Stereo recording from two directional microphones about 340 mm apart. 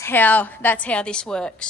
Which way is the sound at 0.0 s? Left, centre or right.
Centre.